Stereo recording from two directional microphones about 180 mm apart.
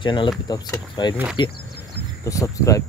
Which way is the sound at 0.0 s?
25° left (ahead or behind).